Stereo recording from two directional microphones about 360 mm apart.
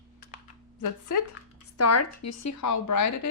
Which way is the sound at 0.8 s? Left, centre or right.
Left.